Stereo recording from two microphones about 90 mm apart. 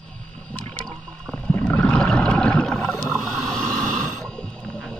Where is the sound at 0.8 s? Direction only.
10° left (ahead or behind).